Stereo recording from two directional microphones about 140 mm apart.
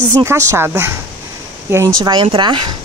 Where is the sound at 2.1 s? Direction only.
35° right (ahead or behind).